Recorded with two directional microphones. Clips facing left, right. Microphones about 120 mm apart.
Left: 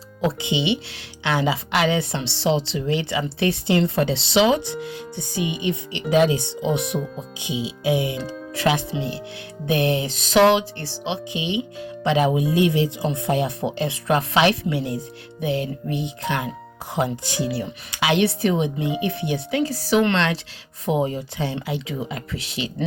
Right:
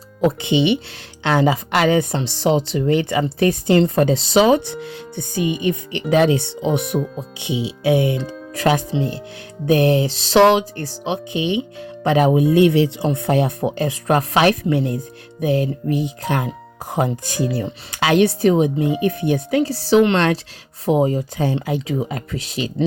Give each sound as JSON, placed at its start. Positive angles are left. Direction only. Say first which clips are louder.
{"t": 0.2, "sound": "speech", "louder": "right 6 dB", "side_deg": -55}
{"t": 6.1, "sound": "speech", "louder": "right 2 dB", "side_deg": -60}
{"t": 8.1, "sound": "speech", "louder": "right 4 dB", "side_deg": 5}
{"t": 8.5, "sound": "speech", "louder": "right 4 dB", "side_deg": -45}
{"t": 15.4, "sound": "speech", "louder": "right 5 dB", "side_deg": -40}
{"t": 20.1, "sound": "speech", "louder": "right 5 dB", "side_deg": -45}